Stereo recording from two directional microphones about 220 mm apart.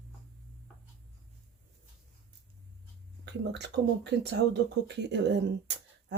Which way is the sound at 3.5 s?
50° right (ahead or behind).